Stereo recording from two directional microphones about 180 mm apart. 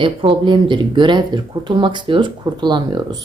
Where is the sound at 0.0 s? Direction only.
30° right (ahead or behind).